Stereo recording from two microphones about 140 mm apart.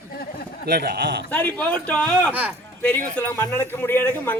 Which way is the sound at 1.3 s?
10° left (ahead or behind).